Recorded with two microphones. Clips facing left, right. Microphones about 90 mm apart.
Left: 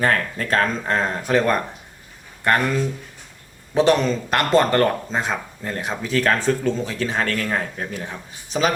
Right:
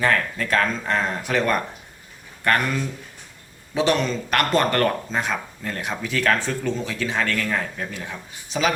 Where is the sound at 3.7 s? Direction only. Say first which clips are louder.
Left 4 dB; 35° left (ahead or behind).